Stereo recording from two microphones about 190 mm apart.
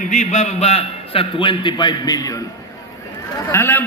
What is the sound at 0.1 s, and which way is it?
A man's voice, 40° left (ahead or behind).